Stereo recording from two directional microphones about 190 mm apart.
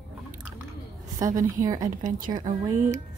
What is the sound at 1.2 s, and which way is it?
Speech, 20° right (ahead or behind).